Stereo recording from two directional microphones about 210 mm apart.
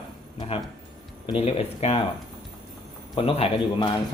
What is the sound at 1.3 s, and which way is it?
Speech, 30° left (ahead or behind).